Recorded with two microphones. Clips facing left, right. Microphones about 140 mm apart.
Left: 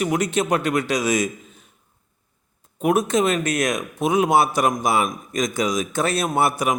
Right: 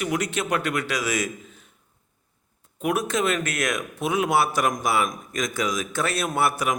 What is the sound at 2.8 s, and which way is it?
A man's voice, 20° left (ahead or behind).